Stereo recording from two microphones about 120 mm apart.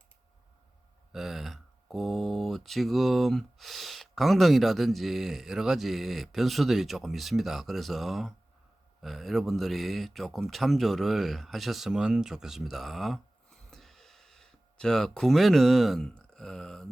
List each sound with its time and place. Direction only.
1.1 s speech: centre (ahead or behind)